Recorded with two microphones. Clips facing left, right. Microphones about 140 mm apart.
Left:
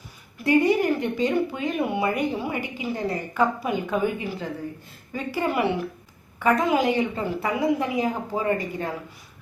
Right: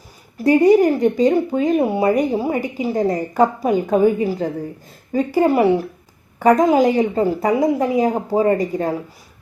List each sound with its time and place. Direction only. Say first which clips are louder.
0.3 s speech: right 8 dB; 40° right (ahead or behind)